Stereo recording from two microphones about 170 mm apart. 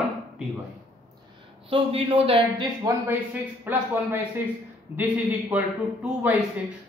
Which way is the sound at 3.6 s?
10° right (ahead or behind).